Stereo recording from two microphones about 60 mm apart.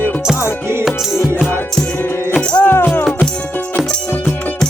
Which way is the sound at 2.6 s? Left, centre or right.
Left.